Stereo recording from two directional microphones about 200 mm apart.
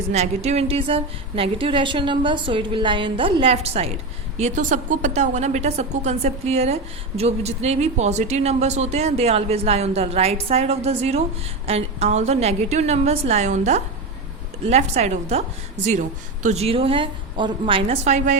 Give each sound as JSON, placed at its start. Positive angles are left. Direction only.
{"t": 0.1, "sound": "a woman's voice", "side_deg": -35}